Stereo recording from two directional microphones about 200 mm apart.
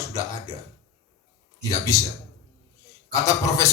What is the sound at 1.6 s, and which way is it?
Speech, 15° left (ahead or behind).